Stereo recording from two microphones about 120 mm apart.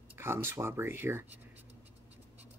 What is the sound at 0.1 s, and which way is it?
Speech, 20° right (ahead or behind).